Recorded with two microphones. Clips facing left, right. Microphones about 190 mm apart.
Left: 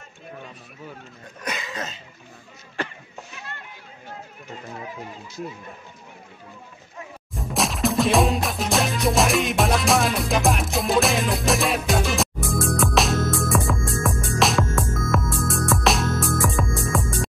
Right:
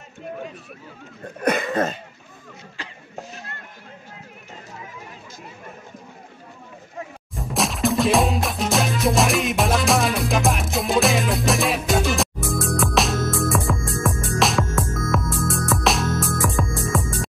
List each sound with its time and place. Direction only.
1.4 s cough: 55° right (ahead or behind)
7.3 s music: centre (ahead or behind)